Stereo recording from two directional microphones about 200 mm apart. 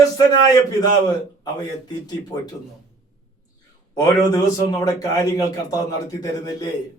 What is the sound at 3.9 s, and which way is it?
A man's voice, 15° left (ahead or behind).